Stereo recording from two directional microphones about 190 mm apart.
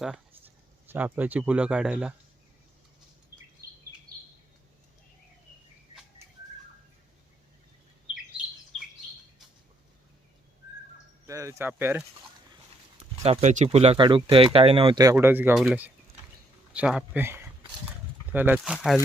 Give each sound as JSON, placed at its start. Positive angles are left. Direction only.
{"t": 0.0, "sound": "speech", "side_deg": -5}
{"t": 11.3, "sound": "speech", "side_deg": -15}
{"t": 13.0, "sound": "speech", "side_deg": -30}
{"t": 15.1, "sound": "speech", "side_deg": -10}